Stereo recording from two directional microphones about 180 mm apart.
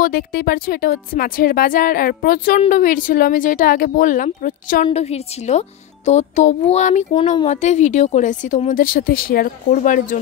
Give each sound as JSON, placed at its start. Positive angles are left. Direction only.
{"t": 0.0, "sound": "speech", "side_deg": 55}
{"t": 4.8, "sound": "a woman's voice", "side_deg": 35}